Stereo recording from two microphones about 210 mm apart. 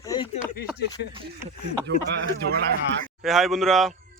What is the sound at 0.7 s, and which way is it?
Speech, 50° left (ahead or behind).